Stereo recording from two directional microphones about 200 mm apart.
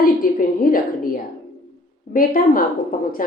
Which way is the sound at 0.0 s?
45° left (ahead or behind).